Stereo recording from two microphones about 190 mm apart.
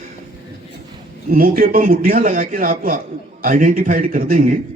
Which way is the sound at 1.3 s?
50° right (ahead or behind).